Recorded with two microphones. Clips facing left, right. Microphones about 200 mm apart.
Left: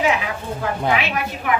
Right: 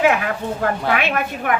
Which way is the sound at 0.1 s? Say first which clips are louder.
Right 2 dB; 55° right (ahead or behind).